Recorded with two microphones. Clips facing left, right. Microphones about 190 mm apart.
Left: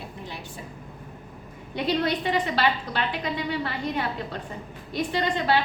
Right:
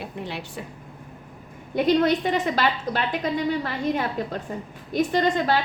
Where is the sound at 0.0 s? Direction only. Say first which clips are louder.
Right 5 dB; 70° right (ahead or behind).